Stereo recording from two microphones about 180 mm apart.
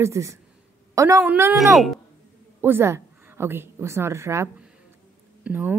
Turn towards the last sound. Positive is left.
turn(degrees=-10)  # may be behind; listen again after turning